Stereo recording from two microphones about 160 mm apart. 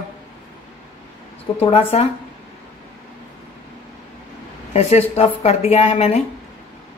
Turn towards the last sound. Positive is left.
turn(degrees=40)  # may be behind; listen again after turning